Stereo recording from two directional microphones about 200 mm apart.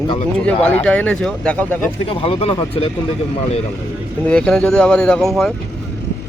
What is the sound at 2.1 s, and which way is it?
Speech, 25° left (ahead or behind).